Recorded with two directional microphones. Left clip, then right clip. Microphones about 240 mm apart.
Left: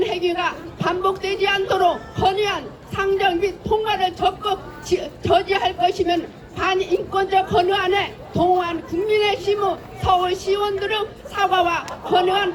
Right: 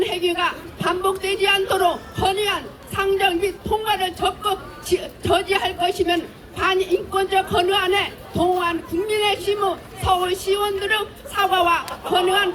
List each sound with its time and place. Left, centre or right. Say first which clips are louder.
0.0 s a woman's voice: even; centre